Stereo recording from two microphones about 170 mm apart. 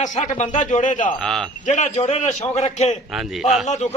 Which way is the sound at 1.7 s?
45° left (ahead or behind).